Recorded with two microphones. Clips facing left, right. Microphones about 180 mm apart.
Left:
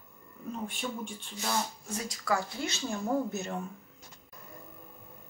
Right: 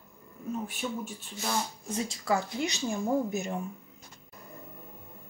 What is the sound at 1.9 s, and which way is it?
Speech, 25° right (ahead or behind).